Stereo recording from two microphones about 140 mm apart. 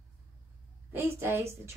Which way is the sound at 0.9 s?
15° right (ahead or behind).